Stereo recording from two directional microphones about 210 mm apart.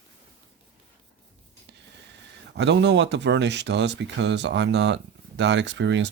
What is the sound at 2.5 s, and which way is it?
Speech, 55° right (ahead or behind).